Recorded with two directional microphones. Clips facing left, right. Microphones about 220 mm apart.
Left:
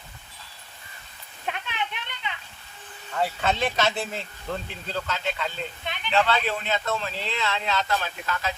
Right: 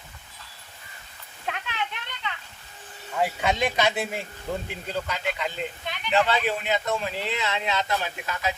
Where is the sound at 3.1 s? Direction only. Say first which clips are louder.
Right 1 dB; 10° right (ahead or behind).